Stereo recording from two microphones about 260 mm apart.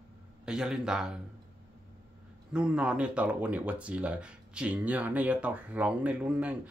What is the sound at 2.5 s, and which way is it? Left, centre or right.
Speech, centre.